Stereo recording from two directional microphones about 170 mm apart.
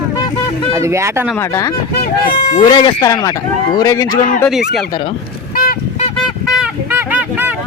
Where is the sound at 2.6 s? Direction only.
30° left (ahead or behind).